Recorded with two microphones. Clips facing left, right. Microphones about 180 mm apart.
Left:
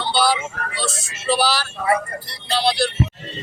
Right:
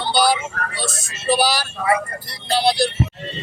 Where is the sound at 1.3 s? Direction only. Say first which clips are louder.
Right 1 dB; 15° right (ahead or behind).